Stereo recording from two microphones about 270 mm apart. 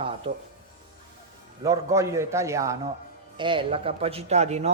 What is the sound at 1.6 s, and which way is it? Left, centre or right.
A man's voice, centre.